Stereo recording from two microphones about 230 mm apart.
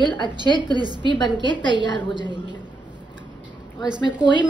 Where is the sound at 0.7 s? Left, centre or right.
Centre.